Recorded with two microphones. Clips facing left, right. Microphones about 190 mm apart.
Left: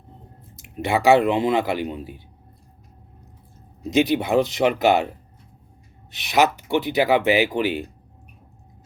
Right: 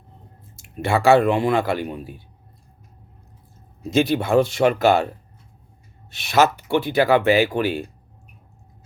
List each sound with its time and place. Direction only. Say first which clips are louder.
0.5 s speech: right 1 dB; 20° left (ahead or behind)
3.8 s speech: even; 15° left (ahead or behind)
6.1 s speech: right 1 dB; 20° left (ahead or behind)